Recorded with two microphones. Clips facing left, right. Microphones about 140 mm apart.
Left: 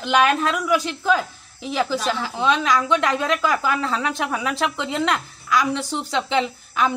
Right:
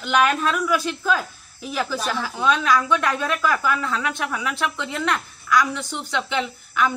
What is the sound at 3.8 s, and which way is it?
A woman's voice, 30° left (ahead or behind).